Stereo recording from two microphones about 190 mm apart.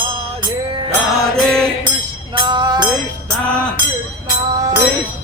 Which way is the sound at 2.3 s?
25° right (ahead or behind).